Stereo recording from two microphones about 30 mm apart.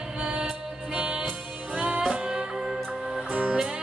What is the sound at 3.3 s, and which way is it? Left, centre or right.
Music, right.